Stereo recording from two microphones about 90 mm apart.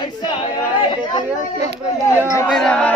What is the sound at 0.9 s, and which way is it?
Speech, 60° left (ahead or behind).